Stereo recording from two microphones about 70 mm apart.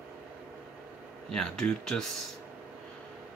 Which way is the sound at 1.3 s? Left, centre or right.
Centre.